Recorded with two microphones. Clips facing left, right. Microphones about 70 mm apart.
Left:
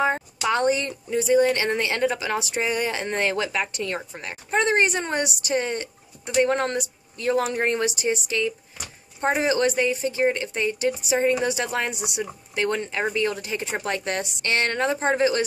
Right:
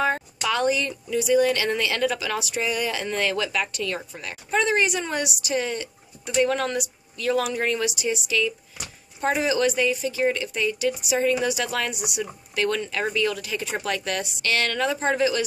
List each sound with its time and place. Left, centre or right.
0.0 s a woman's voice: centre
0.5 s speech: left